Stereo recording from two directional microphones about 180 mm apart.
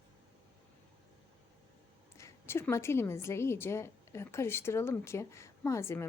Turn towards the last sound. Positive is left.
turn(degrees=15)  # may be behind; listen again after turning